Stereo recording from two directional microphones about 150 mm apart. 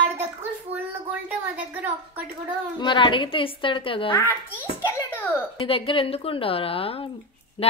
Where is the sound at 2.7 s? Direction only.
30° left (ahead or behind).